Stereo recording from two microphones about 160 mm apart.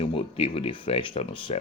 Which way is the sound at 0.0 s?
35° left (ahead or behind).